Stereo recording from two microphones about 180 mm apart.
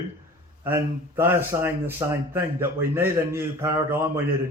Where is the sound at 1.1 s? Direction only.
15° right (ahead or behind).